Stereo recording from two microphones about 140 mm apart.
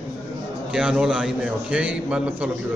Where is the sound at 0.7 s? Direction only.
5° right (ahead or behind).